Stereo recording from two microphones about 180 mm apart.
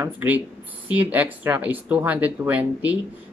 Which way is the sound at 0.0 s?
10° right (ahead or behind).